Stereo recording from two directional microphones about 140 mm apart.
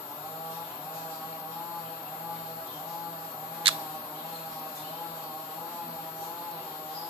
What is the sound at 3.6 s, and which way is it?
Mouse, 35° right (ahead or behind).